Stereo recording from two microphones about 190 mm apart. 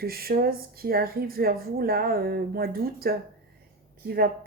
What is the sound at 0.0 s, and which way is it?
Speech, 50° right (ahead or behind).